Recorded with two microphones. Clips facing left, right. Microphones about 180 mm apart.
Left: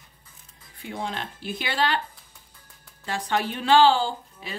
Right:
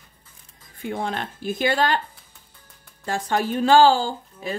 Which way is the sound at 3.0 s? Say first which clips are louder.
Right 3 dB; 45° right (ahead or behind).